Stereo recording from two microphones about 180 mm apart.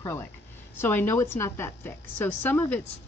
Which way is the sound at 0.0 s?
10° left (ahead or behind).